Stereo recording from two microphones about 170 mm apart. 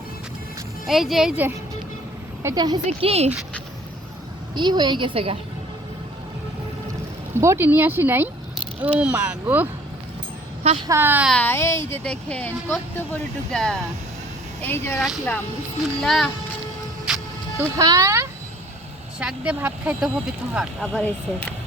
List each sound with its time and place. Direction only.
0.9 s speech: centre (ahead or behind)
2.4 s a woman's voice: 20° right (ahead or behind)
2.8 s a woman's voice: 35° right (ahead or behind)
4.5 s a woman's voice: 25° right (ahead or behind)
7.3 s speech: 15° right (ahead or behind)
10.8 s speech: 15° right (ahead or behind)
11.3 s speech: 10° left (ahead or behind)
14.9 s speech: centre (ahead or behind)
17.7 s a woman's voice: 20° right (ahead or behind)
19.2 s speech: 5° right (ahead or behind)